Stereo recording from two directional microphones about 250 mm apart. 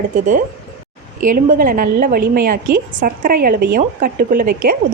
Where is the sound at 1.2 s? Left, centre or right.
Right.